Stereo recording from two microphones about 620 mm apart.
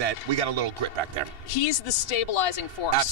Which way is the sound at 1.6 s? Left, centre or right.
Left.